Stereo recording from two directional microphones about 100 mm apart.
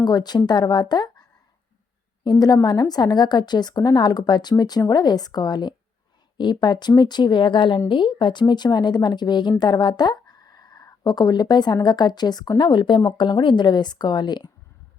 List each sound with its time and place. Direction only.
0.0 s a woman's voice: 45° left (ahead or behind)